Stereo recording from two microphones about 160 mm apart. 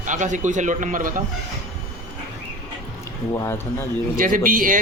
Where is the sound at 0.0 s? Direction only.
50° right (ahead or behind).